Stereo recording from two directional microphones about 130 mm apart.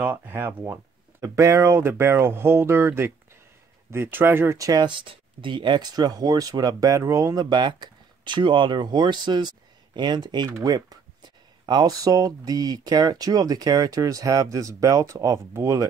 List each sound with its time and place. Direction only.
0.0 s speech: 15° right (ahead or behind)